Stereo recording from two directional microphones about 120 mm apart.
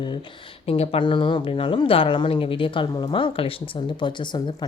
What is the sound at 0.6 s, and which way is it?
Speech, 55° left (ahead or behind).